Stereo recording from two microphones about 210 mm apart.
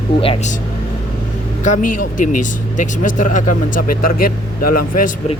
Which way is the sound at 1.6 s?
35° left (ahead or behind).